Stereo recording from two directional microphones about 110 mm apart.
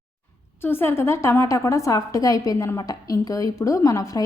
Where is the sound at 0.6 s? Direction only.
20° left (ahead or behind).